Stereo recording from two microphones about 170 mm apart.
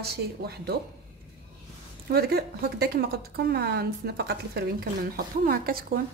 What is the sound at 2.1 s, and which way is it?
A woman's voice, 70° right (ahead or behind).